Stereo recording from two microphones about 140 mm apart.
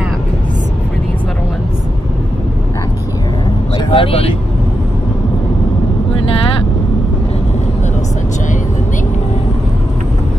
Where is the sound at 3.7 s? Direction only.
40° left (ahead or behind).